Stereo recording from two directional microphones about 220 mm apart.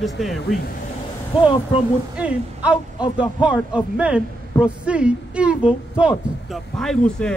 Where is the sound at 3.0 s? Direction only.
5° right (ahead or behind).